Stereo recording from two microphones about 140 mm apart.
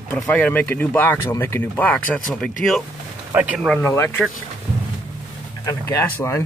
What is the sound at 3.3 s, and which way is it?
Speech, 10° right (ahead or behind).